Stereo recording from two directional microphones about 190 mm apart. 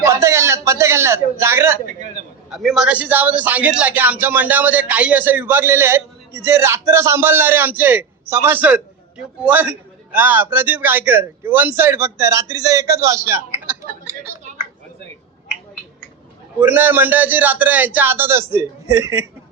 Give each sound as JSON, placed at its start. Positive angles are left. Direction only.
{"t": 0.0, "sound": "a man's voice", "side_deg": -15}
{"t": 1.9, "sound": "a man's voice", "side_deg": -40}
{"t": 2.5, "sound": "a man's voice", "side_deg": 0}
{"t": 16.6, "sound": "a man's voice", "side_deg": -10}